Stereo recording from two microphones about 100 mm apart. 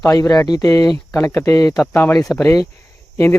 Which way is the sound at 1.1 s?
25° left (ahead or behind).